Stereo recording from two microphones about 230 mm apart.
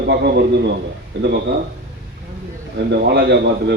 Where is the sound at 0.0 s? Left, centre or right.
Right.